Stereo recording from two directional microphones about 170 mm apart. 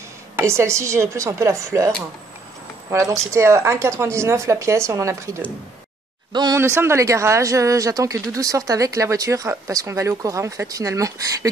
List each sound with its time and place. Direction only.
0.4 s speech: 15° right (ahead or behind)
2.9 s speech: 20° right (ahead or behind)